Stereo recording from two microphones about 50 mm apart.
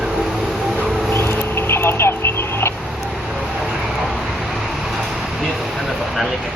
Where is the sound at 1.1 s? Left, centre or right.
Left.